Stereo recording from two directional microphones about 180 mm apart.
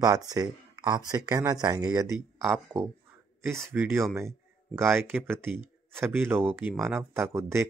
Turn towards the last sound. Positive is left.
turn(degrees=-15)  # may be behind; listen again after turning